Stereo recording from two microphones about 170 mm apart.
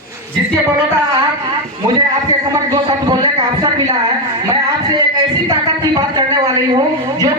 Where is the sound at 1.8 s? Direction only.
25° right (ahead or behind).